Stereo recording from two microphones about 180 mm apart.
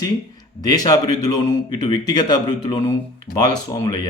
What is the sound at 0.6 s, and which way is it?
Speech, 20° left (ahead or behind).